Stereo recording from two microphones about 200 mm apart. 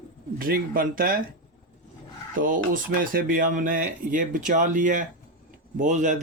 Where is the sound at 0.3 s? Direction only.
45° right (ahead or behind).